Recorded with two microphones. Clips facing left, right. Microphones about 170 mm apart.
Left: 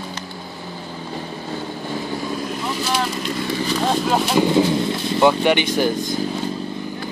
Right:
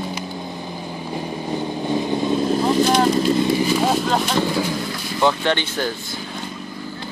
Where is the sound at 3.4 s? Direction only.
15° right (ahead or behind).